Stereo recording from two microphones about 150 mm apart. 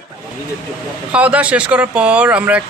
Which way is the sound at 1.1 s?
10° right (ahead or behind).